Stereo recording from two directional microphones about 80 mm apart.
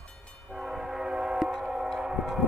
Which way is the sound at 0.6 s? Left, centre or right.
Centre.